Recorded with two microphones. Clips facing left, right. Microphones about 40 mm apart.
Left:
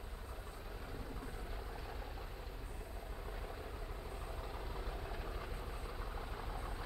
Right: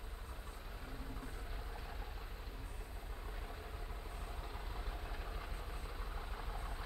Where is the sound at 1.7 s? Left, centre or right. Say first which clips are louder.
Left 2 dB; centre.